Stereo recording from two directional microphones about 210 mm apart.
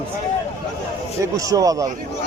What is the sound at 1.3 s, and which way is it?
Speech, 15° right (ahead or behind).